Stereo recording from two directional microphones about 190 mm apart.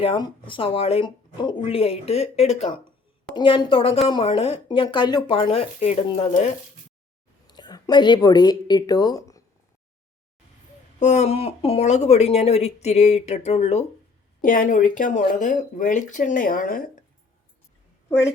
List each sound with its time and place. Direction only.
0.0 s speech: 25° left (ahead or behind)
7.4 s a woman's voice: 20° left (ahead or behind)
11.0 s speech: 35° left (ahead or behind)
18.1 s a woman's voice: 15° left (ahead or behind)